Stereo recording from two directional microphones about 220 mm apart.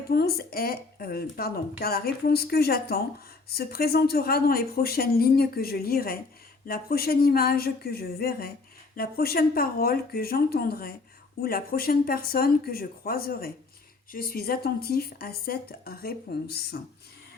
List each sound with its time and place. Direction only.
0.1 s speech: 45° left (ahead or behind)